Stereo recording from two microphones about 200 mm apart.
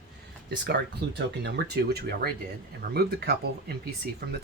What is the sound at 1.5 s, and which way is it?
Speech, 55° right (ahead or behind).